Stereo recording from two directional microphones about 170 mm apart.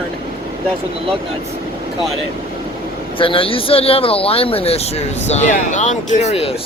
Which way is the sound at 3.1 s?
30° left (ahead or behind).